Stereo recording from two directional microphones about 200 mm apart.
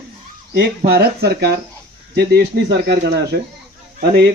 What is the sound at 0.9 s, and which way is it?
Speech, 50° right (ahead or behind).